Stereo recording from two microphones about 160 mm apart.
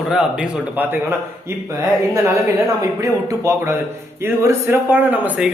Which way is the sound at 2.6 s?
20° right (ahead or behind).